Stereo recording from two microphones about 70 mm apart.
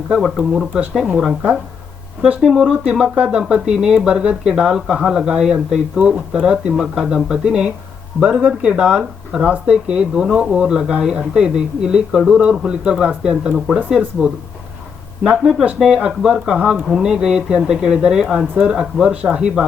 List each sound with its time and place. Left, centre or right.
0.2 s speech: centre
15.8 s speech: centre